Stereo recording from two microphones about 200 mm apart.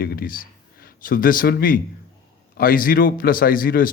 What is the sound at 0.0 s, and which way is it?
A man's voice, 45° left (ahead or behind).